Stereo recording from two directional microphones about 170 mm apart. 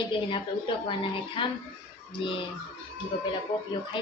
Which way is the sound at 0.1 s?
30° left (ahead or behind).